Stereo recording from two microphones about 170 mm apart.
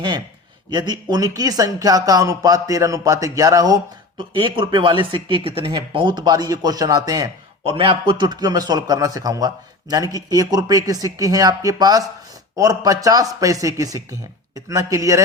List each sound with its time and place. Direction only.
0.7 s speech: 25° right (ahead or behind)